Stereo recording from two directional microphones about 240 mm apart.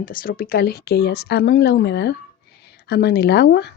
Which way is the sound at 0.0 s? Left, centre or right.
Left.